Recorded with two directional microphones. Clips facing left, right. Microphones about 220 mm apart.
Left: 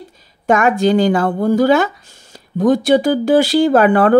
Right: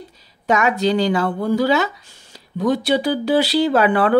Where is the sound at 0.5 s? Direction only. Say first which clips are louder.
Left 4 dB; 50° left (ahead or behind).